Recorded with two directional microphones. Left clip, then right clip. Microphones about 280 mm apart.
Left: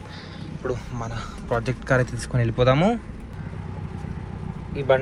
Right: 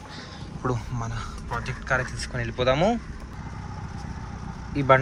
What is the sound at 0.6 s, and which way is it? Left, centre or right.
Speech, centre.